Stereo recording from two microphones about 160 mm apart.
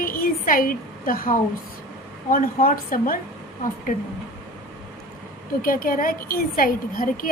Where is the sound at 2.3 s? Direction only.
65° left (ahead or behind).